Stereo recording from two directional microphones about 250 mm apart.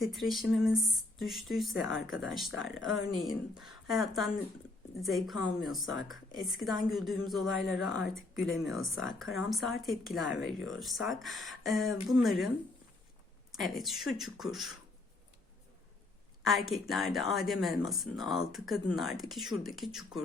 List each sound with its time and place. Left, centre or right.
0.0 s speech: centre
5.8 s speech: left
6.1 s speech: centre
13.6 s speech: centre
16.5 s speech: centre